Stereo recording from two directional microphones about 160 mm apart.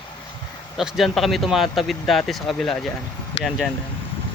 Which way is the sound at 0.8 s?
Centre (ahead or behind).